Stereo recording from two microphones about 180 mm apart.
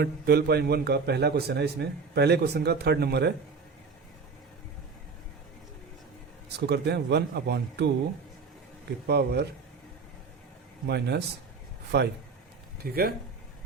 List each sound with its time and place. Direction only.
0.0 s a man's voice: 60° right (ahead or behind)
6.7 s speech: 65° right (ahead or behind)
9.0 s a man's voice: 65° right (ahead or behind)
10.8 s a man's voice: 65° right (ahead or behind)